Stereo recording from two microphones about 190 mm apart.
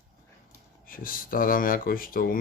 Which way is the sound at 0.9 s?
50° left (ahead or behind).